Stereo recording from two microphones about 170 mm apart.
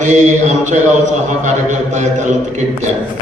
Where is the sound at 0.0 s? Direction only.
45° right (ahead or behind).